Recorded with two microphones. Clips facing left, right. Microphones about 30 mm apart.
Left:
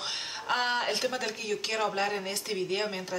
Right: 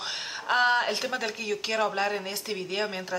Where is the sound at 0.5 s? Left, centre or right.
Centre.